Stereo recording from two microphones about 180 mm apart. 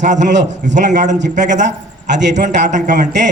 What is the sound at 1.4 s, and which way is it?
Speech, 40° right (ahead or behind).